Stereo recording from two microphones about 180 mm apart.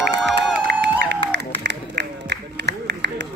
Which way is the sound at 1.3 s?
70° right (ahead or behind).